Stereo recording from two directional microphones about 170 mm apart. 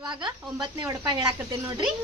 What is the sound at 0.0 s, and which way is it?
Speech, 25° right (ahead or behind).